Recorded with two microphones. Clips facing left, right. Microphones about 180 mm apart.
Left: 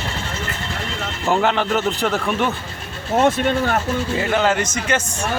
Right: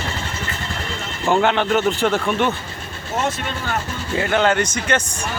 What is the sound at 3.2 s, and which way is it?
Speech, 55° left (ahead or behind).